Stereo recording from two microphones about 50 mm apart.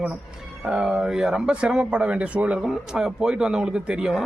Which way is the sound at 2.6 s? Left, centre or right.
Centre.